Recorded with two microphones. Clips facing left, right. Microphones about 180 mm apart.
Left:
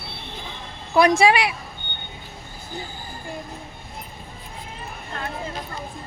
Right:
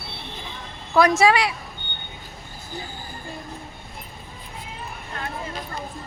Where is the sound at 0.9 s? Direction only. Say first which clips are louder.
Left 1 dB; 15° left (ahead or behind).